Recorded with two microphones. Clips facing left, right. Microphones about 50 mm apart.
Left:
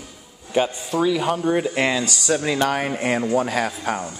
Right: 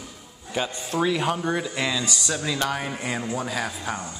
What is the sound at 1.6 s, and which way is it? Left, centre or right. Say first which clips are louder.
Speech: left 6 dB; left.